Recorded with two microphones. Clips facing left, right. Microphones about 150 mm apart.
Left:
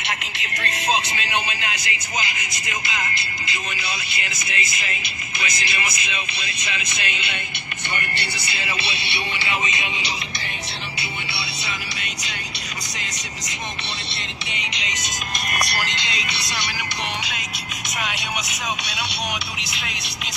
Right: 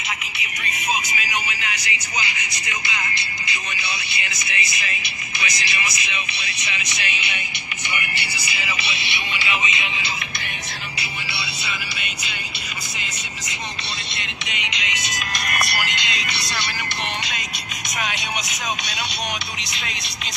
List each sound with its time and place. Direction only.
0.0 s a sound: 80° left
0.7 s music: 70° left (ahead or behind); by 3.1 s 50° left (ahead or behind)
3.7 s speech: 50° left (ahead or behind)
14.6 s music: 35° left (ahead or behind)
15.5 s speech: 5° right (ahead or behind)
15.9 s music: 30° left (ahead or behind)
17.2 s speech: 5° left (ahead or behind)